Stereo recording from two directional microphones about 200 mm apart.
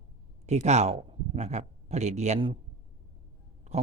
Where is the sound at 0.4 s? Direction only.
35° right (ahead or behind).